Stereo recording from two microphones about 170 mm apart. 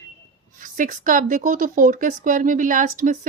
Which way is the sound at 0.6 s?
50° right (ahead or behind).